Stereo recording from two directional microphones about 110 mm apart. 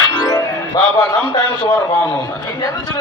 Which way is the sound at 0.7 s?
35° left (ahead or behind).